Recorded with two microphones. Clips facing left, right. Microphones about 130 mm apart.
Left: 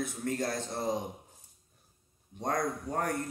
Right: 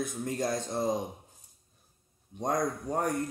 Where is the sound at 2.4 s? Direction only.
15° right (ahead or behind).